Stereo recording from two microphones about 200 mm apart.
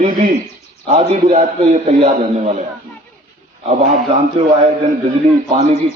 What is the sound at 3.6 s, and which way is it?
Speech, 35° right (ahead or behind).